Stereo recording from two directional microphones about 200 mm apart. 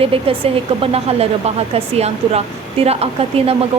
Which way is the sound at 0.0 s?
30° right (ahead or behind).